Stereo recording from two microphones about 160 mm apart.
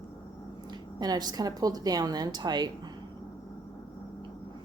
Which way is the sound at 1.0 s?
25° right (ahead or behind).